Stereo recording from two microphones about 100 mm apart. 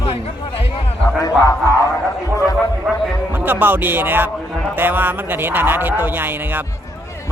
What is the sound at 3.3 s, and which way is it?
A man's voice, 20° right (ahead or behind).